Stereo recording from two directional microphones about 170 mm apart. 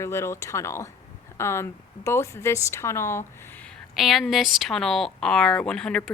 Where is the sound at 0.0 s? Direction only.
15° left (ahead or behind).